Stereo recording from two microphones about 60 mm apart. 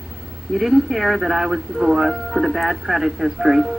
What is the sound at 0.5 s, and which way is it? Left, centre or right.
Speech, centre.